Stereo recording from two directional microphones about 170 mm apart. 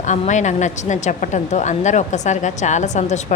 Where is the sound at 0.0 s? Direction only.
45° left (ahead or behind).